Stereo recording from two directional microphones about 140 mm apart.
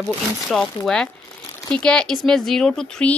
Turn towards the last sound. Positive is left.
turn(degrees=5)  # may be behind; listen again after turning